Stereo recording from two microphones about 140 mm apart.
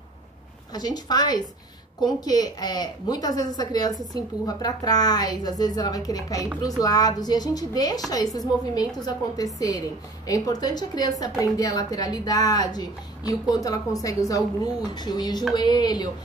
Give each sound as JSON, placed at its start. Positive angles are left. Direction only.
{"t": 0.7, "sound": "a woman's voice", "side_deg": 30}